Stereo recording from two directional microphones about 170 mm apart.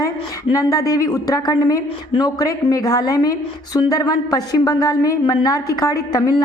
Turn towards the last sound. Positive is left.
turn(degrees=20)  # may be behind; listen again after turning